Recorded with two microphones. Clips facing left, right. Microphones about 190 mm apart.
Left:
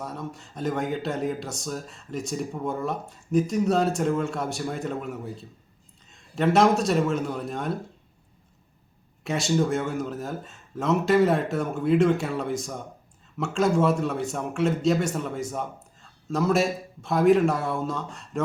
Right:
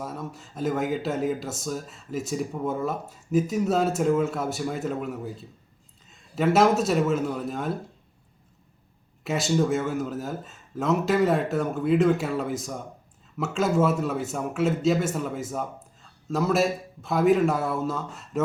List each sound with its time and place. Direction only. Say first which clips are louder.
0.0 s speech: even; 5° right (ahead or behind)
9.2 s speech: even; centre (ahead or behind)